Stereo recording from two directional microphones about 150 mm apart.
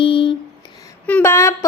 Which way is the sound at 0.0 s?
35° left (ahead or behind).